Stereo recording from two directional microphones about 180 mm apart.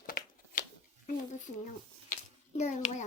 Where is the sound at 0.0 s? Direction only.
55° left (ahead or behind).